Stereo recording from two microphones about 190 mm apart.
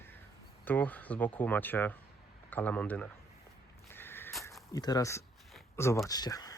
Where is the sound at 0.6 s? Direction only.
10° left (ahead or behind).